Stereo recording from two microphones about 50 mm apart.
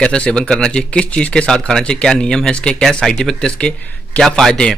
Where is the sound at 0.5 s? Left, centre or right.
Centre.